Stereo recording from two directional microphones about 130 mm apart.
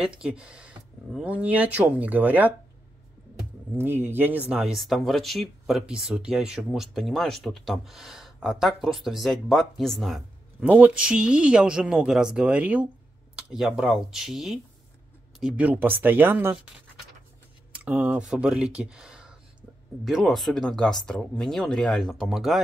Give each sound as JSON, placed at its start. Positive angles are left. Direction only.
{"t": 0.0, "sound": "speech", "side_deg": -5}
{"t": 3.7, "sound": "speech", "side_deg": -20}
{"t": 4.5, "sound": "speech", "side_deg": -5}
{"t": 10.7, "sound": "speech", "side_deg": -10}
{"t": 17.7, "sound": "speech", "side_deg": -10}